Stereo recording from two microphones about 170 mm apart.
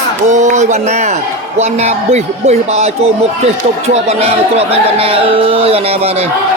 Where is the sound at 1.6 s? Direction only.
40° right (ahead or behind).